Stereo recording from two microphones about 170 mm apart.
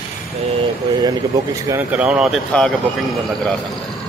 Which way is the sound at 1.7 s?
10° right (ahead or behind).